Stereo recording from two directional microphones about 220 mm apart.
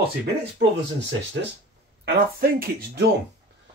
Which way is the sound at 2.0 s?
45° right (ahead or behind).